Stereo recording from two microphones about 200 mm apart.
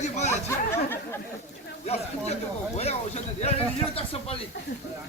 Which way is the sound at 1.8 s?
30° left (ahead or behind).